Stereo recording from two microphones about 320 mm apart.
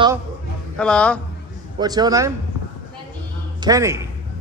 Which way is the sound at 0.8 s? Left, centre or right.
Centre.